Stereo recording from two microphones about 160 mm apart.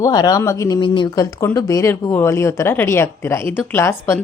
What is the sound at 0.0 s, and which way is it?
A woman's voice, 25° left (ahead or behind).